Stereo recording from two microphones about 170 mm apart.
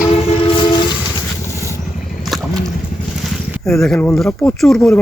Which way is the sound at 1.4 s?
15° left (ahead or behind).